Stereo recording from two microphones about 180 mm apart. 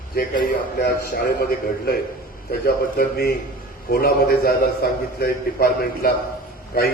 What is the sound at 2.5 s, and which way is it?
A man's voice, 55° left (ahead or behind).